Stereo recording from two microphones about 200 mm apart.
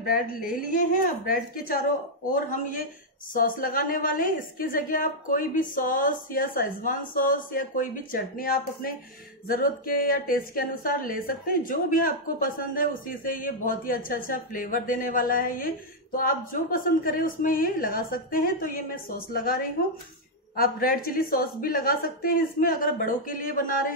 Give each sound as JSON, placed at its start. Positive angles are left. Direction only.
{"t": 0.0, "sound": "speech", "side_deg": 45}
{"t": 3.3, "sound": "speech", "side_deg": 45}
{"t": 20.5, "sound": "speech", "side_deg": 45}